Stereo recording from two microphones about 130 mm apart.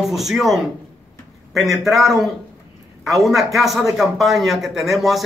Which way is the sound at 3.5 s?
Centre (ahead or behind).